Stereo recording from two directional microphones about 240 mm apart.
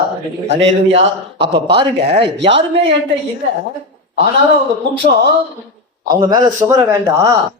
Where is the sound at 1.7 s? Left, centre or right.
Right.